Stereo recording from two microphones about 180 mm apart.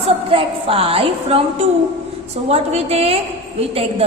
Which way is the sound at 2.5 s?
35° right (ahead or behind).